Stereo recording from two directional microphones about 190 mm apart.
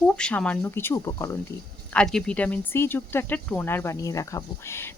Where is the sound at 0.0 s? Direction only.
5° left (ahead or behind).